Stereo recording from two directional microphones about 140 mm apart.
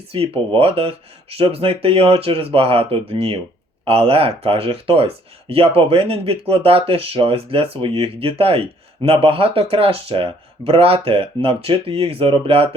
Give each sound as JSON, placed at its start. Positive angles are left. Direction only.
{"t": 0.1, "sound": "speech", "side_deg": -45}